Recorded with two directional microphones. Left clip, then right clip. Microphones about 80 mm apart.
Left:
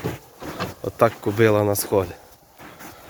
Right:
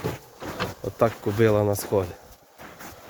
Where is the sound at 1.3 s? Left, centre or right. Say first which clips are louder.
Left 3 dB; centre.